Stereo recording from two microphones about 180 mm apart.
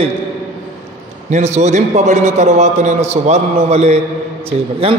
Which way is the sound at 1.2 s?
40° right (ahead or behind).